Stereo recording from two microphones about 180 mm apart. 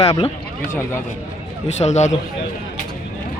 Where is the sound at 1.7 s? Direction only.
40° left (ahead or behind).